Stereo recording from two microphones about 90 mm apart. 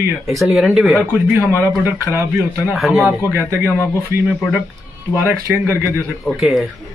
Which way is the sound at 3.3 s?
25° right (ahead or behind).